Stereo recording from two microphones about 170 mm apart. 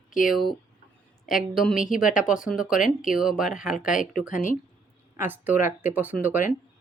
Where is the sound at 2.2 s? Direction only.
5° right (ahead or behind).